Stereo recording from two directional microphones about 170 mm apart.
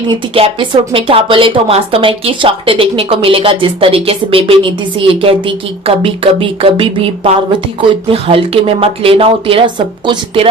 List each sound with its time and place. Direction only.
0.1 s a woman's voice: 30° right (ahead or behind)